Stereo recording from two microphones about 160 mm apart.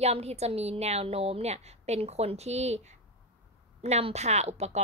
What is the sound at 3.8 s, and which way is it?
Speech, 45° right (ahead or behind).